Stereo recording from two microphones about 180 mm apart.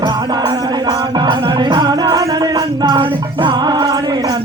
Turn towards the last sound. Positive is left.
turn(degrees=-25)  # may be behind; listen again after turning